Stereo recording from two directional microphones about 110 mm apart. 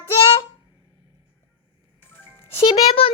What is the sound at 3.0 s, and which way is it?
Speech, 60° left (ahead or behind).